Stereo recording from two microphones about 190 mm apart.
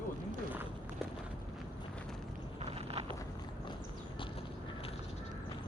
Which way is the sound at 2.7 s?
30° right (ahead or behind).